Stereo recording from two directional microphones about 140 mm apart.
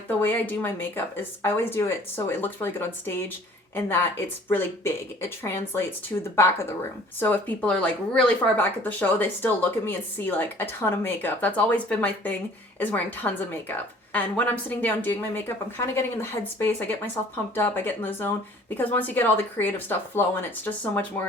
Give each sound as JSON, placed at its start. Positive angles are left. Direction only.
{"t": 0.2, "sound": "speech", "side_deg": 15}